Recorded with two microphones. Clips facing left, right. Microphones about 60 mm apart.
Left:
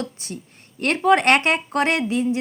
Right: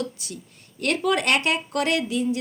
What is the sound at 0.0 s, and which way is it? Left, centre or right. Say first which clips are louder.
Speech: left 1 dB; left.